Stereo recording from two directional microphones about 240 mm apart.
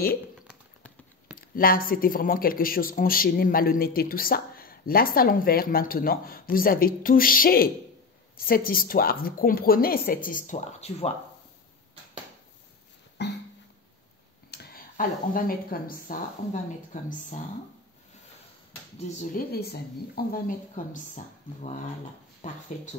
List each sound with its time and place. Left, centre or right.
0.5 s a sound: centre
1.5 s a man's voice: left
13.2 s music: left
14.5 s a man's voice: left
18.9 s a man's voice: left